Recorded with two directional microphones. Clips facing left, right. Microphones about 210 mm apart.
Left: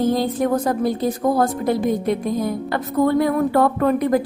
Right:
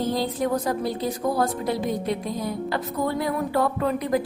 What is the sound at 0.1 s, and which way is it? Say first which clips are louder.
A woman's voice: left 5 dB; 50° left (ahead or behind).